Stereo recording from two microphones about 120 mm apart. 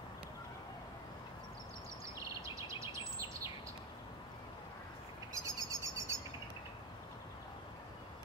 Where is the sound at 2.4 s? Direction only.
25° right (ahead or behind).